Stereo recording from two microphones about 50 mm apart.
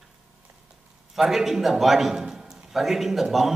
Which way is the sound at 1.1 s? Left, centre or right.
Centre.